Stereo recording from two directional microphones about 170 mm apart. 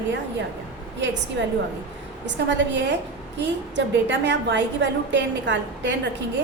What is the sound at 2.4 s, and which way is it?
A woman's voice, 90° right.